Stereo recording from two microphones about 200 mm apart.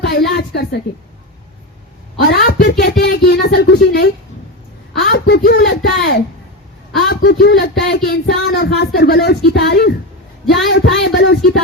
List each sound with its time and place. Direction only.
0.0 s speech: 55° left (ahead or behind)
2.2 s speech: 50° left (ahead or behind)